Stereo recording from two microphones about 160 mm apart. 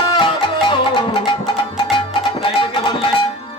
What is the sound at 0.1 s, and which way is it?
Music, 30° left (ahead or behind).